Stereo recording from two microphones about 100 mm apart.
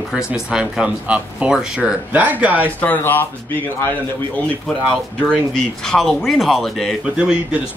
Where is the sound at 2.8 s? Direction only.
20° left (ahead or behind).